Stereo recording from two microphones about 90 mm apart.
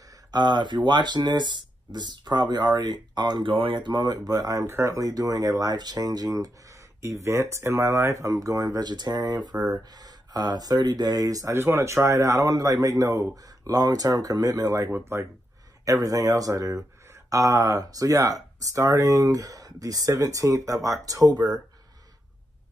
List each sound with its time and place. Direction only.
0.3 s speech: 55° right (ahead or behind)
3.5 s speech: 70° right (ahead or behind); by 4.6 s 45° right (ahead or behind)
4.6 s speech: 30° right (ahead or behind)
11.5 s speech: 30° right (ahead or behind)
14.9 s speech: 25° right (ahead or behind)
15.8 s speech: 40° right (ahead or behind)